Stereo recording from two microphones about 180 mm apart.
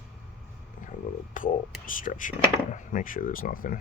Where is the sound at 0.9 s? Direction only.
45° left (ahead or behind).